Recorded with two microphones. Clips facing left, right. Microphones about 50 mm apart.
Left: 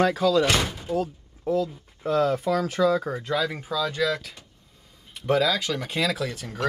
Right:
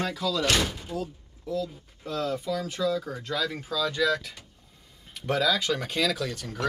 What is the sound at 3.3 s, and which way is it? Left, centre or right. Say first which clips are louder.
Speech: left 2 dB; centre.